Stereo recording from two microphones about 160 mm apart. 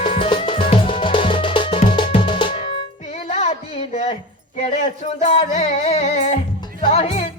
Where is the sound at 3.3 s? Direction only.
45° left (ahead or behind).